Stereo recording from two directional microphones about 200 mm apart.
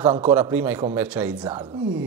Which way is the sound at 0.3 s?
10° right (ahead or behind).